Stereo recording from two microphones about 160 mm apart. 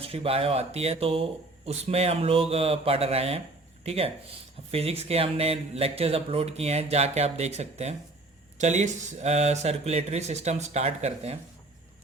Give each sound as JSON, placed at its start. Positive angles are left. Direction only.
{"t": 0.0, "sound": "speech", "side_deg": -35}